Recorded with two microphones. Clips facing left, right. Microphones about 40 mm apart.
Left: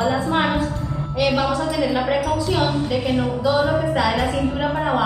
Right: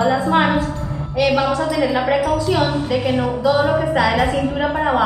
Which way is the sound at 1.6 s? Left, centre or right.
Centre.